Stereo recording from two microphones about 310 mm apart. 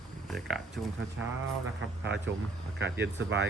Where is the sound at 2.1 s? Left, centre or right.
Right.